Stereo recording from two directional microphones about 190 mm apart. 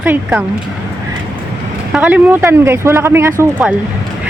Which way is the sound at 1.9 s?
10° right (ahead or behind).